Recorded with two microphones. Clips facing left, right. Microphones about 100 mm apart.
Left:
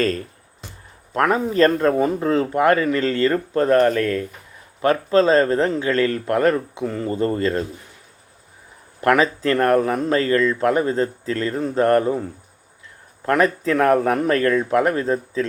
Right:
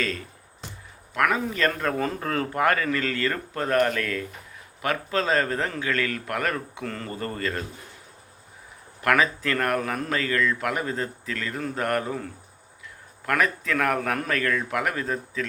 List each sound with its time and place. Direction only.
0.0 s a man's voice: 45° left (ahead or behind)
2.0 s a man's voice: 20° left (ahead or behind)
7.1 s a man's voice: 30° left (ahead or behind)
9.0 s a man's voice: 30° left (ahead or behind)